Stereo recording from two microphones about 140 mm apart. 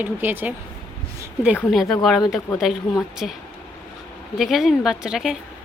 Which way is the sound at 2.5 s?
15° left (ahead or behind).